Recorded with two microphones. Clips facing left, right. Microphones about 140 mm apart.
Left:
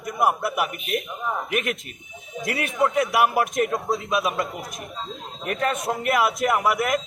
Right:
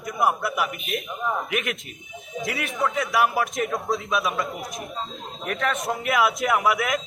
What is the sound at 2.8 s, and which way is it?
Speech, 50° left (ahead or behind).